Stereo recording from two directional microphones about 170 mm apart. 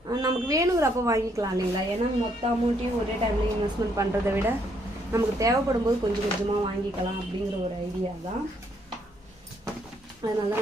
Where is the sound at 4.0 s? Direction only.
15° right (ahead or behind).